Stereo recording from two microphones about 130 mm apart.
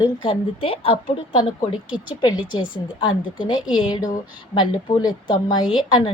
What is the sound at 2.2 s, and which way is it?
A woman's voice, 35° left (ahead or behind).